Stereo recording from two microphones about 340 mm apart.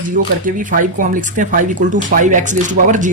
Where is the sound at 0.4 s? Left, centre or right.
Right.